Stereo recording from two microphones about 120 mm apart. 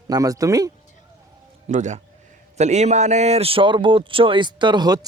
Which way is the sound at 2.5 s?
70° right (ahead or behind).